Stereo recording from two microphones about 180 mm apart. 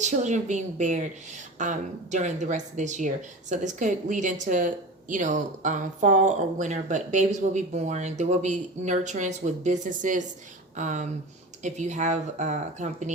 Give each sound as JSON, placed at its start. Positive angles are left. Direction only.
{"t": 0.0, "sound": "speech", "side_deg": -40}